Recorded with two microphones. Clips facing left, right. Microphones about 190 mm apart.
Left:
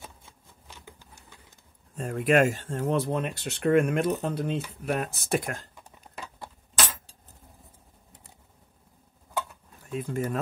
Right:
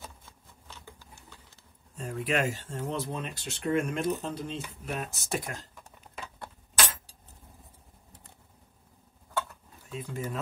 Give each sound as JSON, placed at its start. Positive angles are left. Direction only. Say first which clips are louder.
{"t": 0.0, "sound": "typewriter", "louder": "even", "side_deg": 15}
{"t": 2.0, "sound": "speech", "louder": "left 7 dB", "side_deg": 55}
{"t": 9.8, "sound": "speech", "louder": "left 6 dB", "side_deg": 50}